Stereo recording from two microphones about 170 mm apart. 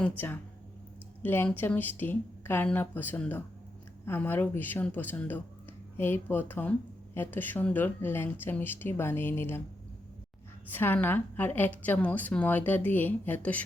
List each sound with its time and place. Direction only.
1.2 s a woman's voice: 10° left (ahead or behind)
10.7 s a woman's voice: 10° left (ahead or behind)